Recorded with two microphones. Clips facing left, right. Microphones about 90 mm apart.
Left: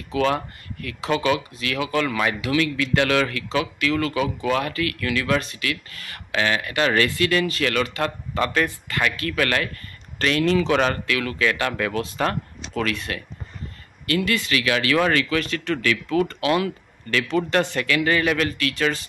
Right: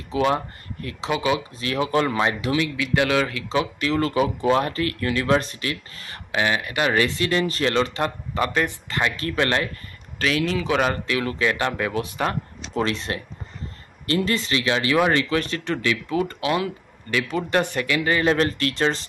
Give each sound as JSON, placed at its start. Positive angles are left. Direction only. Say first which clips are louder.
{"t": 0.1, "sound": "speech", "louder": "even", "side_deg": -25}
{"t": 1.6, "sound": "speech", "louder": "right 2 dB", "side_deg": -30}
{"t": 10.1, "sound": "speech", "louder": "left 3 dB", "side_deg": -5}
{"t": 11.1, "sound": "speech", "louder": "even", "side_deg": -25}
{"t": 12.7, "sound": "speech", "louder": "right 1 dB", "side_deg": -25}